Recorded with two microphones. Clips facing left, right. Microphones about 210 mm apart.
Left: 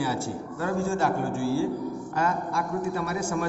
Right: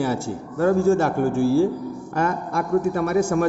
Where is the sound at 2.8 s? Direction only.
50° right (ahead or behind).